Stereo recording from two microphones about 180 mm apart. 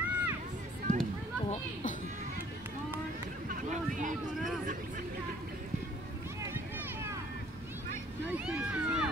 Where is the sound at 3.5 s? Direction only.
45° right (ahead or behind).